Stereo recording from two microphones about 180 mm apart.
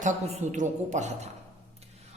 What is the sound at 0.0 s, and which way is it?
A woman's voice, 45° right (ahead or behind).